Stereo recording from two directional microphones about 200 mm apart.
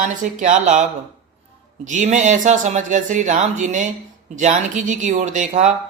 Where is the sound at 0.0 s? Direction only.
40° right (ahead or behind).